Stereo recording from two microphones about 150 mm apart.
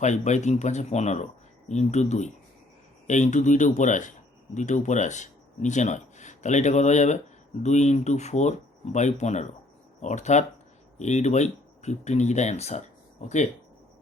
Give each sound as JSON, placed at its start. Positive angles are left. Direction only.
{"t": 0.0, "sound": "speech", "side_deg": 50}